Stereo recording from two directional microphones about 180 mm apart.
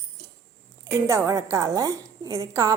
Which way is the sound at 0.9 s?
15° right (ahead or behind).